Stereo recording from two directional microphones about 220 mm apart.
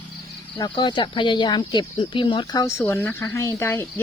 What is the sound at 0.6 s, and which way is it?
Speech, 20° left (ahead or behind).